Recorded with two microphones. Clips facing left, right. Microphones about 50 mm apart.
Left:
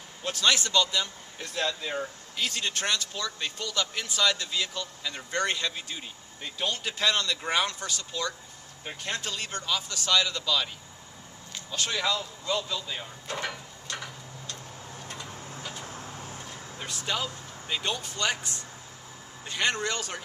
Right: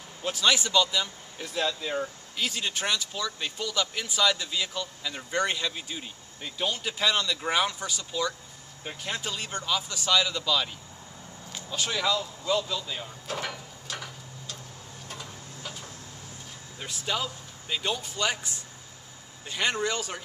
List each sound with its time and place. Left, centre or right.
0.2 s speech: centre
11.5 s vehicle: centre
15.7 s vehicle: left
16.8 s speech: centre